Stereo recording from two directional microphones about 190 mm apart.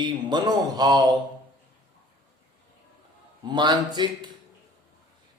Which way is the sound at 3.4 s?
25° right (ahead or behind).